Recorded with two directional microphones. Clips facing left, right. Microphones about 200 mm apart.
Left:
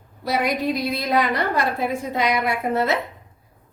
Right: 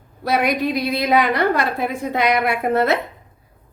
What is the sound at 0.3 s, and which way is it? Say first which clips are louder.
A woman's voice: right 3 dB; 65° right (ahead or behind).